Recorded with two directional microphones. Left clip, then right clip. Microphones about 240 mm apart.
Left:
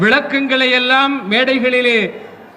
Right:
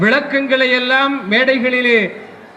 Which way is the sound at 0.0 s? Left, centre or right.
Left.